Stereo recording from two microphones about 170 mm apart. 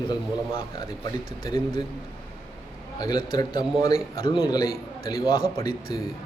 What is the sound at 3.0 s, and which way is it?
Speech, 25° left (ahead or behind).